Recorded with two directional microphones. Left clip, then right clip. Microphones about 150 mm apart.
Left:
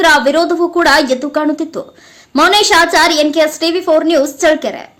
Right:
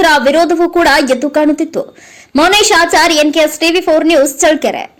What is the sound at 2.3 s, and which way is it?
A woman's voice, 10° right (ahead or behind).